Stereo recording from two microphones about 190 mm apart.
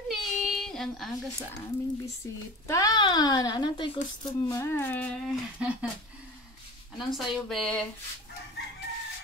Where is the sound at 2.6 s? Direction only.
15° left (ahead or behind).